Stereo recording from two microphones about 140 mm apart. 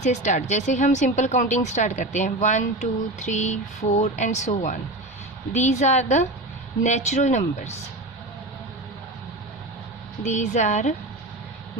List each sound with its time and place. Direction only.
0.0 s speech: 60° left (ahead or behind)
10.2 s speech: 60° left (ahead or behind)